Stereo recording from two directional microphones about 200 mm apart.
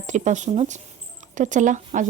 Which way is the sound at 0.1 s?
35° right (ahead or behind).